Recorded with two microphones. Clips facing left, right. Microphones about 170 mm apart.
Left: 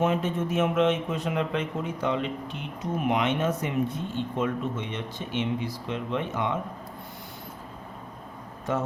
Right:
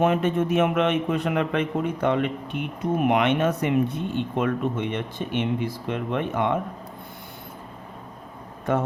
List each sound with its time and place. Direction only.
0.0 s speech: 60° right (ahead or behind)